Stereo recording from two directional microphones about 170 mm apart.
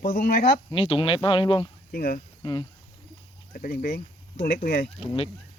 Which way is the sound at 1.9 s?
60° left (ahead or behind).